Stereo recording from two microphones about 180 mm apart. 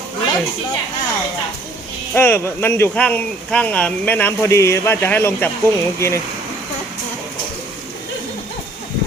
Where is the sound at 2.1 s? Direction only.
10° left (ahead or behind).